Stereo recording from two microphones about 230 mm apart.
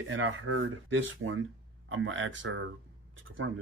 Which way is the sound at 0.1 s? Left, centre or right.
Right.